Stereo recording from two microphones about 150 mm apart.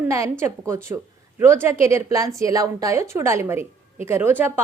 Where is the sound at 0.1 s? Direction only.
20° right (ahead or behind).